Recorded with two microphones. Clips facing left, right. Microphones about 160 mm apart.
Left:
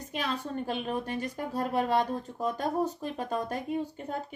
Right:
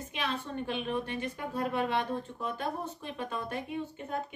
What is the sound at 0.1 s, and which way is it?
A woman's voice, 40° left (ahead or behind).